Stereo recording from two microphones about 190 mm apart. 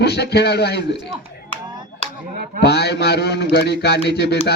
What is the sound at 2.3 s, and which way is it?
Speech, 50° right (ahead or behind).